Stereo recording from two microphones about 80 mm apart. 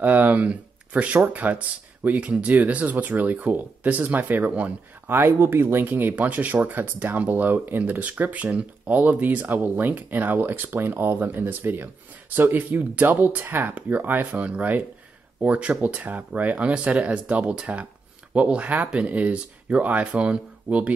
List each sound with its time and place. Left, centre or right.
0.0 s speech: right